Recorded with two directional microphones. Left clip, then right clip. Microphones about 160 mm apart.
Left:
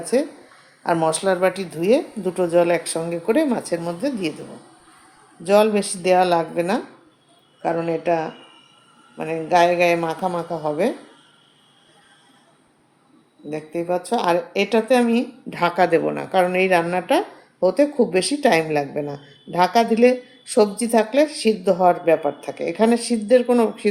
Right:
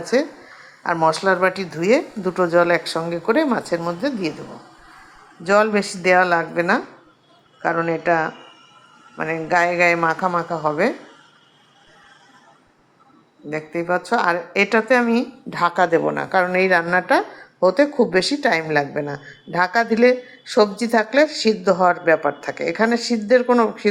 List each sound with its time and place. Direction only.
0.0 s a woman's voice: 10° left (ahead or behind)
5.4 s a woman's voice: 15° left (ahead or behind)
13.8 s a woman's voice: 10° left (ahead or behind)